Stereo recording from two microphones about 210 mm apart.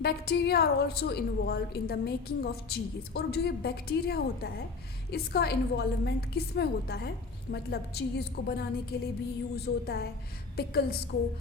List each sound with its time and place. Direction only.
0.0 s a woman's voice: 50° left (ahead or behind)